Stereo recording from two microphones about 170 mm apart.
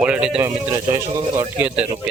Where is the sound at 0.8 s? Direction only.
15° right (ahead or behind).